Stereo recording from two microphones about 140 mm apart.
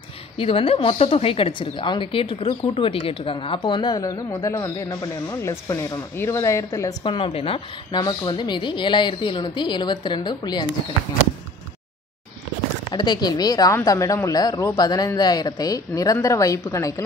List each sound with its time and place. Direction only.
0.4 s a woman's voice: 40° left (ahead or behind)
7.2 s a woman's voice: 40° left (ahead or behind)
8.0 s a woman's voice: 30° left (ahead or behind)
12.9 s a man's voice: 30° left (ahead or behind)